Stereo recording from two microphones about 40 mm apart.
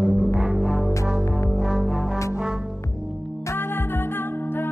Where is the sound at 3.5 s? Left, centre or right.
Left.